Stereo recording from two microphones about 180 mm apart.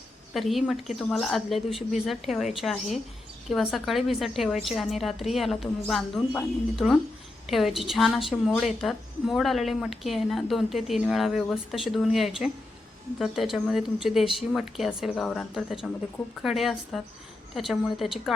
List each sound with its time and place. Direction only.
0.3 s a woman's voice: centre (ahead or behind)